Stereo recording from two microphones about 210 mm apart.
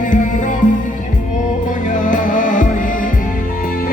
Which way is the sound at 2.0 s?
40° left (ahead or behind).